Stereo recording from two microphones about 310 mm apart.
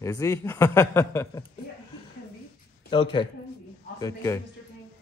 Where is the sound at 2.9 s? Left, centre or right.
Centre.